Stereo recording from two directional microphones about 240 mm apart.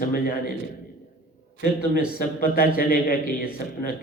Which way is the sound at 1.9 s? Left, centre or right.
Left.